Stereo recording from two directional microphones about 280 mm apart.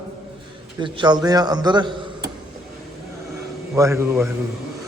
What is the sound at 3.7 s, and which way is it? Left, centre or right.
Speech, centre.